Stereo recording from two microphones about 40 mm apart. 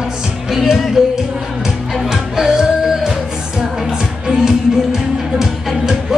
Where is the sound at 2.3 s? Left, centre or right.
Centre.